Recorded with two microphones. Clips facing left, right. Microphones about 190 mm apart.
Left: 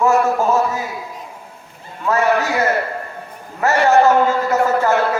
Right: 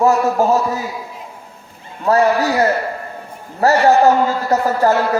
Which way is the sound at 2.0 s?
35° right (ahead or behind).